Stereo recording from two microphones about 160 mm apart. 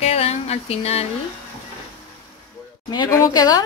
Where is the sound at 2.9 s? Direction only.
20° left (ahead or behind).